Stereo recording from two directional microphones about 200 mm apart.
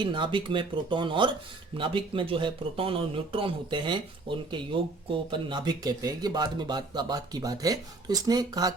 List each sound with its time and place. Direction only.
0.0 s speech: 25° right (ahead or behind)